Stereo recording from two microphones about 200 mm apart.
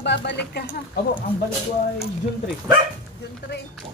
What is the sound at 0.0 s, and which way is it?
Speech, 60° left (ahead or behind).